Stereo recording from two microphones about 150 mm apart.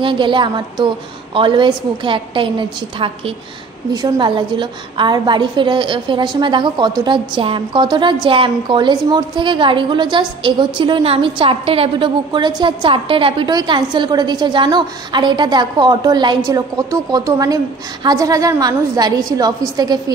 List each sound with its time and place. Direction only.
0.0 s a woman's voice: 35° right (ahead or behind)
3.9 s a woman's voice: 30° right (ahead or behind)